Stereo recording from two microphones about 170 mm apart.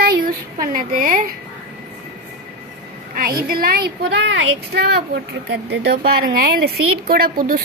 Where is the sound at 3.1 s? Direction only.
60° right (ahead or behind); by 4.2 s 80° right.